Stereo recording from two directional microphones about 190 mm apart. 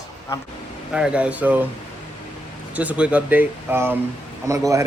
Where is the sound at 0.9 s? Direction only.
5° right (ahead or behind).